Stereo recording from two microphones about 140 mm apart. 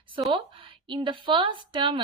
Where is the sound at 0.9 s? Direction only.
35° right (ahead or behind).